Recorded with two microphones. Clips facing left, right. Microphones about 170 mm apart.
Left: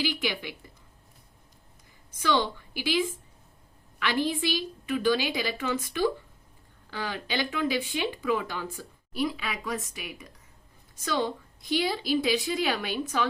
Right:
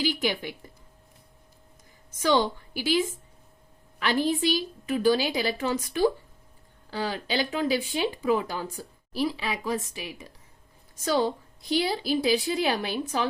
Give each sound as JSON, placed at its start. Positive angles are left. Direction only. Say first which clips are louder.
{"t": 0.0, "sound": "a woman's voice", "louder": "right 3 dB", "side_deg": -45}
{"t": 2.0, "sound": "a woman's voice", "louder": "right 3 dB", "side_deg": -45}